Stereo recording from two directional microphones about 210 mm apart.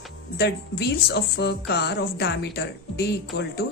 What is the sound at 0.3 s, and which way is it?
Speech, 50° left (ahead or behind).